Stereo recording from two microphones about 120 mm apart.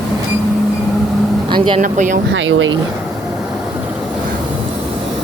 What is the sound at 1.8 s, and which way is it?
Speech, 90° right.